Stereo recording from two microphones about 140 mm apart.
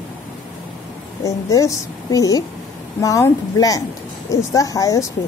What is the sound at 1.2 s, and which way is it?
A woman's voice, 25° left (ahead or behind).